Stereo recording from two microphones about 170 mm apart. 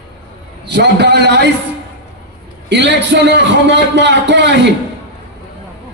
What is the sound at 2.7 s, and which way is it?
A man's voice, 90° right.